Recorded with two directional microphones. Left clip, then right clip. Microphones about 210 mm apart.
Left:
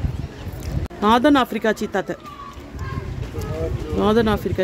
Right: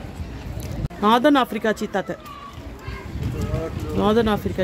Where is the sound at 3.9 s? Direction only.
5° left (ahead or behind).